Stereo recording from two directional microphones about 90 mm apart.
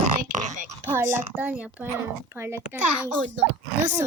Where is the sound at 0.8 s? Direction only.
25° right (ahead or behind).